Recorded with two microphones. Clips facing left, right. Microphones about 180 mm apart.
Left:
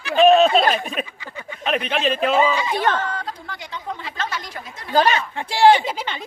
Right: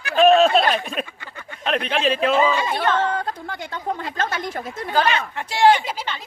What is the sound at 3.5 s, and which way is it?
A woman's voice, 50° right (ahead or behind).